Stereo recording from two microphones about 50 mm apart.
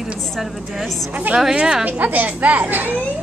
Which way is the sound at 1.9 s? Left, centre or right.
Right.